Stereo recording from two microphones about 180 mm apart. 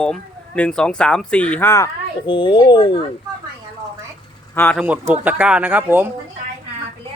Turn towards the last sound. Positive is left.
turn(degrees=-10)  # may be behind; listen again after turning